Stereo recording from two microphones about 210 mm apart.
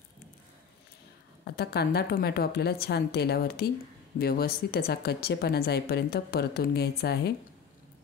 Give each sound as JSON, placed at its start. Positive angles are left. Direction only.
{"t": 1.4, "sound": "a woman's voice", "side_deg": 50}